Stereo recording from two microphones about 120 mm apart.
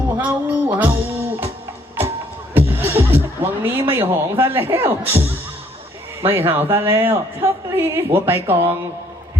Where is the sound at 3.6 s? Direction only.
20° right (ahead or behind).